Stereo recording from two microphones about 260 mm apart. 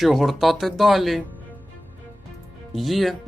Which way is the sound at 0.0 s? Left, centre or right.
Centre.